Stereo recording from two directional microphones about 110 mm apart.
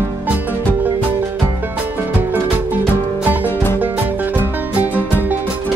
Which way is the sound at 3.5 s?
20° left (ahead or behind).